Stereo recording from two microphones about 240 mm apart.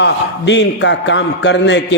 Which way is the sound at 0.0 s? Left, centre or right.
Left.